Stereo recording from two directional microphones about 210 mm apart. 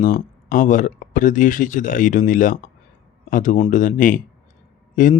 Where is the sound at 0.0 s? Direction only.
40° left (ahead or behind).